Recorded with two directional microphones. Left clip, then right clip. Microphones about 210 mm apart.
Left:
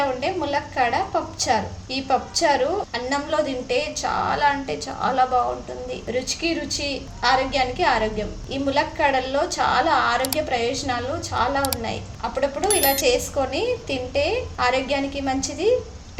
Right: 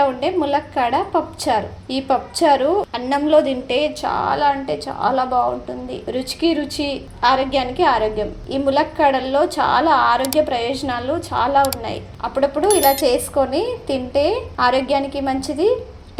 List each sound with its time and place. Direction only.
0.0 s speech: 25° right (ahead or behind)
12.6 s speech: centre (ahead or behind)
13.1 s speech: 25° right (ahead or behind)